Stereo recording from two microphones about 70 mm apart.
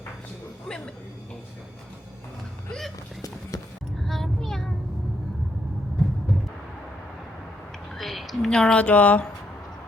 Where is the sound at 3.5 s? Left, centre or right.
Left.